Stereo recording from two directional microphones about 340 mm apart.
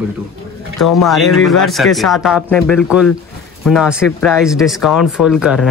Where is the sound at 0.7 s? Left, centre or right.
Left.